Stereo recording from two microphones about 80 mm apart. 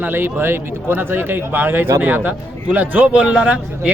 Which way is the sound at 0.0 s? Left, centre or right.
Right.